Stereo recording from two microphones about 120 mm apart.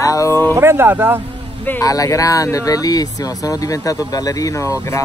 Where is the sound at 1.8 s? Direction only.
30° left (ahead or behind).